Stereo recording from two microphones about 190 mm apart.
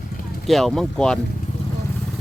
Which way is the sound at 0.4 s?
Centre (ahead or behind).